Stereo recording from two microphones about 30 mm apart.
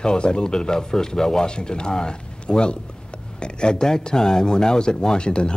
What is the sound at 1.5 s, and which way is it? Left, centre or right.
Speech, left.